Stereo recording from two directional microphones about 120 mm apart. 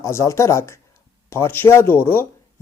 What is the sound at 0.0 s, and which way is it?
Speech, 25° left (ahead or behind).